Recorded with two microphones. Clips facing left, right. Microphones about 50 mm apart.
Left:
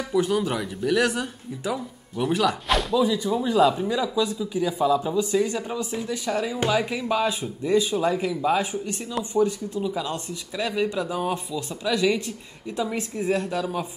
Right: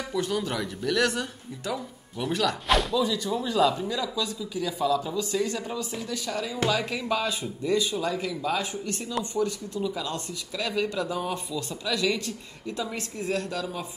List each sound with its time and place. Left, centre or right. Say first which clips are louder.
0.1 s speech: left 6 dB; centre
3.0 s speech: left 4 dB; centre